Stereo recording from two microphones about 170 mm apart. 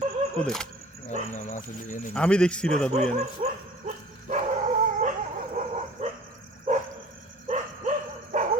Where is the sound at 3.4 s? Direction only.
35° right (ahead or behind).